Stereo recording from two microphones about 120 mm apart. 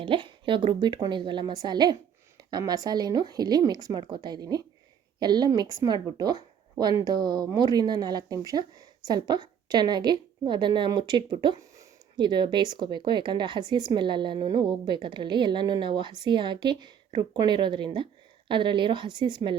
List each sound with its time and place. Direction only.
0.0 s a woman's voice: 45° right (ahead or behind)